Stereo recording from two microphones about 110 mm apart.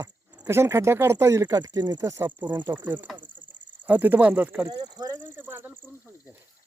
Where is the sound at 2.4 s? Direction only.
45° right (ahead or behind).